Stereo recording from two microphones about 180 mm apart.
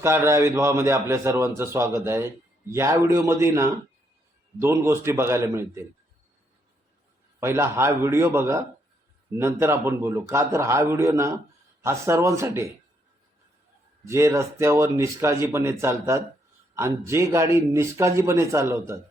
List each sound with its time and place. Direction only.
0.0 s a man's voice: 15° right (ahead or behind)
7.3 s a man's voice: 15° right (ahead or behind)
14.0 s a man's voice: 15° right (ahead or behind)